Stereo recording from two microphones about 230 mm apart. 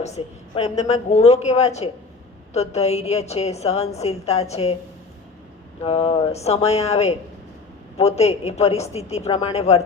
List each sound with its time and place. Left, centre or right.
0.0 s a woman's voice: left
5.8 s a woman's voice: left